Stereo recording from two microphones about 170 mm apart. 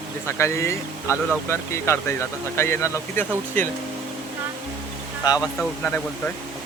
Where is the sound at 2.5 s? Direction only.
15° left (ahead or behind).